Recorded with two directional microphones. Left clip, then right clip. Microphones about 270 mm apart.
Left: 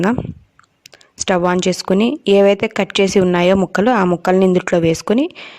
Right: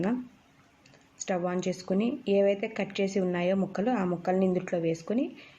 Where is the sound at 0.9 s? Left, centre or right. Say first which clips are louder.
Left 15 dB; left.